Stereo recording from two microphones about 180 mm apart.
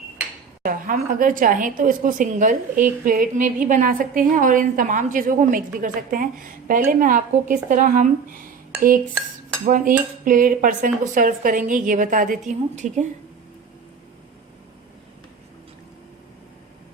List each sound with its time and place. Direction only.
0.6 s a woman's voice: 50° right (ahead or behind)
9.6 s a woman's voice: 50° right (ahead or behind)